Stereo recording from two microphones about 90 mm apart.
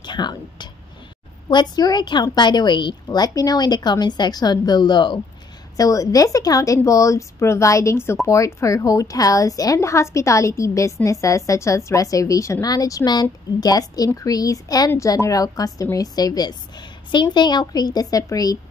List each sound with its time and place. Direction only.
0.0 s a woman's voice: 55° left (ahead or behind)
5.8 s a woman's voice: 40° left (ahead or behind)